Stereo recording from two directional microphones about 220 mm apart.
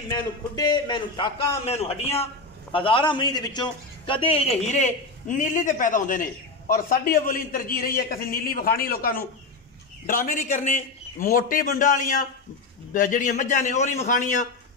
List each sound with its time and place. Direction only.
0.1 s a man's voice: 20° left (ahead or behind); by 14.5 s 35° left (ahead or behind)